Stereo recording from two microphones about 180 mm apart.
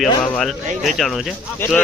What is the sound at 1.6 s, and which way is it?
Speech, 10° left (ahead or behind).